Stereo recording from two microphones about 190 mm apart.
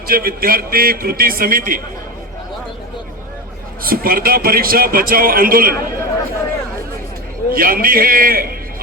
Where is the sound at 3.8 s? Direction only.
50° right (ahead or behind).